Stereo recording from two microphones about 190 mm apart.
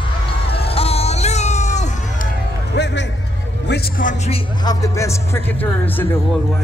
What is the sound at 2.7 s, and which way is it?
Music, 65° left (ahead or behind).